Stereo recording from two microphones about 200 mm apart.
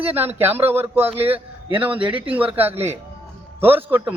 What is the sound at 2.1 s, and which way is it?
A man's voice, 5° right (ahead or behind).